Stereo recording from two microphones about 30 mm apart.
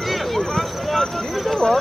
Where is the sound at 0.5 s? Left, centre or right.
Centre.